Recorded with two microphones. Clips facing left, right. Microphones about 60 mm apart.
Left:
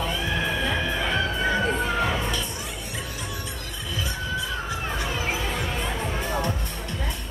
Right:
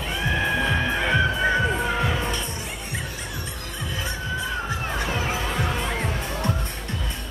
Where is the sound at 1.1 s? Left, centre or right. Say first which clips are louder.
Right 4 dB; centre.